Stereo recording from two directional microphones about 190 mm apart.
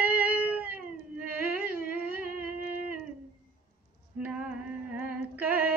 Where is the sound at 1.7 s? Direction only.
50° right (ahead or behind).